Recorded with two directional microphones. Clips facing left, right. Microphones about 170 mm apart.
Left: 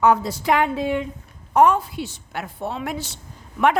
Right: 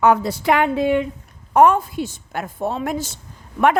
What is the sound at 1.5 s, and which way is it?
A woman's voice, 50° right (ahead or behind).